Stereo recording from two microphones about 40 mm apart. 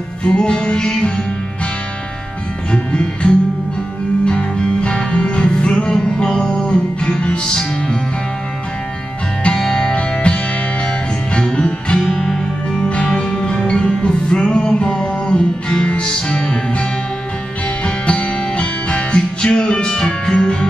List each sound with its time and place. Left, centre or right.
0.2 s music: left
2.7 s music: left
9.4 s music: left
9.9 s music: left
17.8 s music: left